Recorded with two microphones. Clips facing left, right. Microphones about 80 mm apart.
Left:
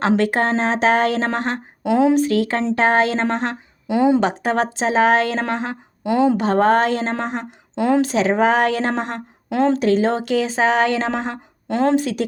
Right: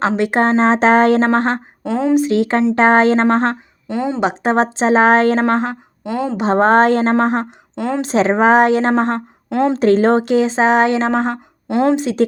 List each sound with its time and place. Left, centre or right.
0.2 s speech: right
1.8 s speech: centre
2.1 s speech: right
3.8 s speech: centre
4.2 s speech: right
6.0 s speech: centre
6.3 s speech: right
7.8 s speech: centre
8.0 s speech: right
9.5 s speech: centre
9.7 s speech: right
11.7 s a woman's voice: centre
11.9 s speech: right